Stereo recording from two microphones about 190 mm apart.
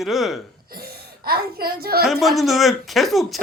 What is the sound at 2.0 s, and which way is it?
A man's voice, centre (ahead or behind).